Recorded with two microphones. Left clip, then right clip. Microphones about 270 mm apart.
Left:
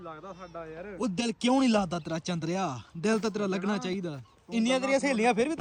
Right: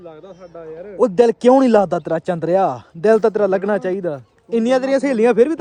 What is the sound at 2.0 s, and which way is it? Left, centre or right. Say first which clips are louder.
Speech: right 15 dB; right.